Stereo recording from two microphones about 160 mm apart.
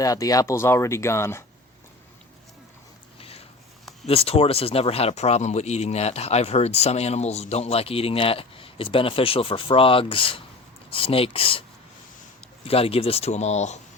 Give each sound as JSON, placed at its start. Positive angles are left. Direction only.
{"t": 0.0, "sound": "speech", "side_deg": 20}
{"t": 3.2, "sound": "a sound", "side_deg": 35}
{"t": 4.0, "sound": "speech", "side_deg": 40}
{"t": 12.6, "sound": "speech", "side_deg": 35}